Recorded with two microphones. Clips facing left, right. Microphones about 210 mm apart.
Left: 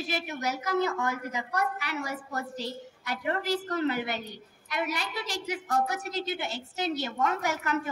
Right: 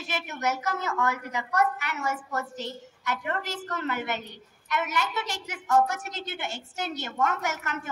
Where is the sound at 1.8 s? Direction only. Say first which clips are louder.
Right 2 dB; 50° right (ahead or behind).